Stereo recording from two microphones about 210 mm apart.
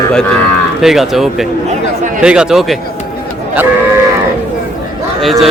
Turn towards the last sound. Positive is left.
turn(degrees=0)  # may be behind; listen again after turning